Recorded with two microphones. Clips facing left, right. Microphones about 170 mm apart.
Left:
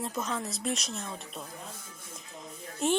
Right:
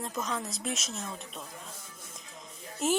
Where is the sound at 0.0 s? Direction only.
Centre (ahead or behind).